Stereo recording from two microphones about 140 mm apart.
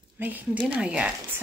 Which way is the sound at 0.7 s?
10° right (ahead or behind).